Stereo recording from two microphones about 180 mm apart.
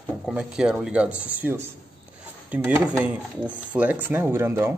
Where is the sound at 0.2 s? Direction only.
5° right (ahead or behind).